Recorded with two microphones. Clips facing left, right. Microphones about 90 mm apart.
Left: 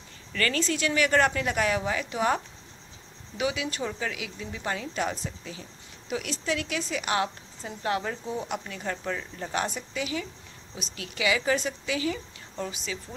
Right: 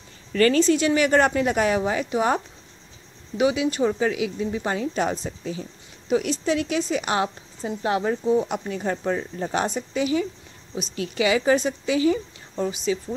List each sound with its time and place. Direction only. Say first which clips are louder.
0.3 s a woman's voice: right 10 dB; 30° right (ahead or behind)
6.0 s a woman's voice: right 8 dB; 25° right (ahead or behind)